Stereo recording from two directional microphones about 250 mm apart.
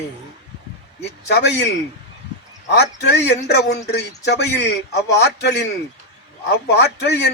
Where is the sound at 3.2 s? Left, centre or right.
Left.